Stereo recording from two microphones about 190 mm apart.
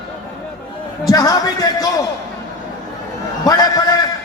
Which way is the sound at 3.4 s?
20° left (ahead or behind).